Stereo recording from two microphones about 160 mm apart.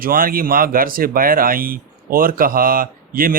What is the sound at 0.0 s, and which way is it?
Speech, 65° right (ahead or behind).